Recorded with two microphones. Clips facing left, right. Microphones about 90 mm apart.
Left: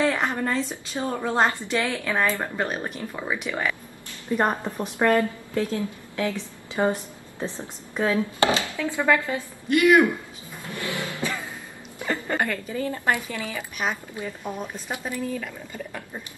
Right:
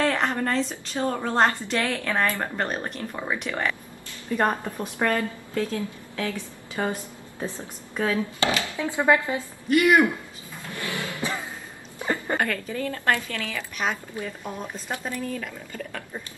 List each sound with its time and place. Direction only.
0.0 s a woman's voice: 5° left (ahead or behind)
4.3 s a woman's voice: 20° left (ahead or behind)
8.6 s speech: 20° right (ahead or behind)
10.7 s a sound: 20° left (ahead or behind)
12.0 s a sound: 20° right (ahead or behind)
12.4 s speech: 10° left (ahead or behind)